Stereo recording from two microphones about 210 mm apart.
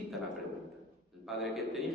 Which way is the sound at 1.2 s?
Centre (ahead or behind).